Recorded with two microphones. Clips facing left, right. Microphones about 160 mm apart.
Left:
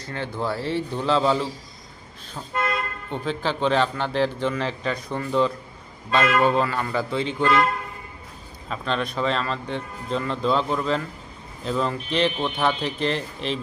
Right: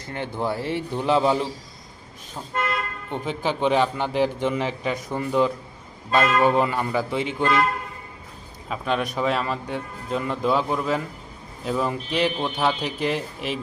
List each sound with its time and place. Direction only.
0.0 s speech: 15° right (ahead or behind)
3.1 s speech: 15° right (ahead or behind)
8.7 s speech: 10° right (ahead or behind)